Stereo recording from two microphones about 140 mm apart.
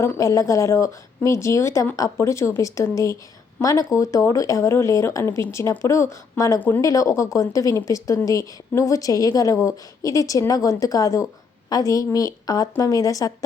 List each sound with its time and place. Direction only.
0.0 s speech: 20° left (ahead or behind)
6.6 s speech: 15° left (ahead or behind)
6.8 s speech: 25° left (ahead or behind)